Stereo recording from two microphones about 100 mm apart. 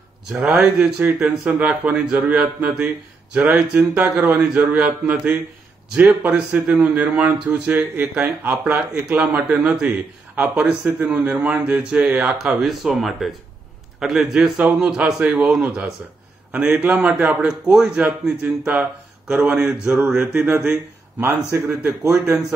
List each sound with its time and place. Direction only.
0.4 s speech: 15° right (ahead or behind)
12.4 s speech: 5° right (ahead or behind)